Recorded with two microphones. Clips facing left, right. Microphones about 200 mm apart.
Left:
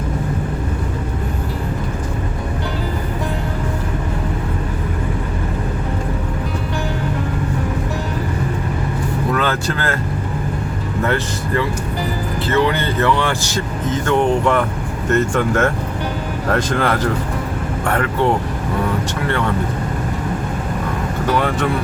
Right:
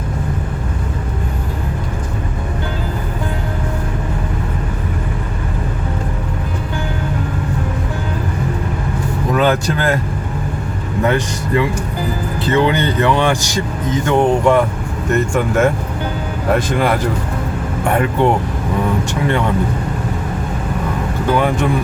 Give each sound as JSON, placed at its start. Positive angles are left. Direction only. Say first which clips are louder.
{"t": 9.3, "sound": "speech", "louder": "right 7 dB", "side_deg": -15}
{"t": 11.0, "sound": "speech", "louder": "right 3 dB", "side_deg": -15}
{"t": 21.3, "sound": "speech", "louder": "right 3 dB", "side_deg": -15}